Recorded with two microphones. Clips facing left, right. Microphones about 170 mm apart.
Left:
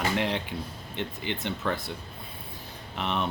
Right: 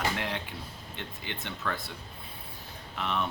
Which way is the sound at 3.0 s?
20° left (ahead or behind).